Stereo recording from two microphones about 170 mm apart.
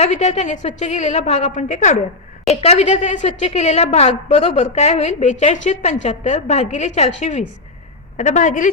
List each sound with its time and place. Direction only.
0.0 s a woman's voice: 45° left (ahead or behind)